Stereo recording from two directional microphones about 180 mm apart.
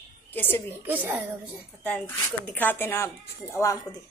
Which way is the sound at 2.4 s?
10° left (ahead or behind).